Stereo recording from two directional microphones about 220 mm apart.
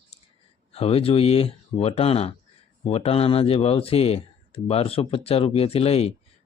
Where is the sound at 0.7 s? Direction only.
25° left (ahead or behind).